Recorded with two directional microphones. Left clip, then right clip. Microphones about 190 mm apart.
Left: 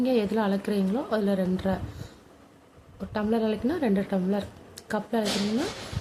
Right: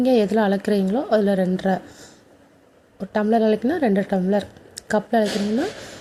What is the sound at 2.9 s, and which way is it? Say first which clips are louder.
Speech: right 8 dB; 25° right (ahead or behind).